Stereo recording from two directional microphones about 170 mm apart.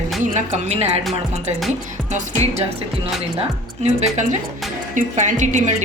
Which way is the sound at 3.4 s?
40° right (ahead or behind).